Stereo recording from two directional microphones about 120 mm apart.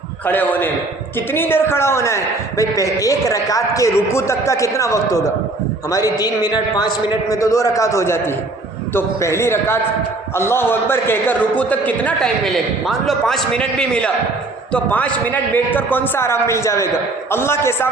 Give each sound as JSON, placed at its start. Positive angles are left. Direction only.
{"t": 0.3, "sound": "a man's voice", "side_deg": 15}
{"t": 12.5, "sound": "a man's voice", "side_deg": 0}